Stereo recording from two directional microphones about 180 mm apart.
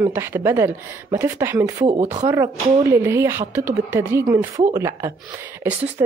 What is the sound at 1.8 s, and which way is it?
Speech, 35° right (ahead or behind).